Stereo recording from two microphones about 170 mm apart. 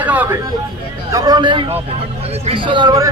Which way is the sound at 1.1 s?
25° right (ahead or behind).